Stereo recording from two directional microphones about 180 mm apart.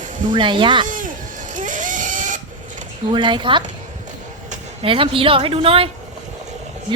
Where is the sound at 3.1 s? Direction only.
25° right (ahead or behind).